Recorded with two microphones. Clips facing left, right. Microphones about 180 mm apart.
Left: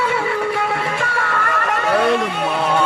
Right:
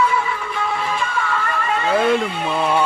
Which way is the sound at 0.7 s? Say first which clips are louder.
Left 1 dB; 70° left (ahead or behind).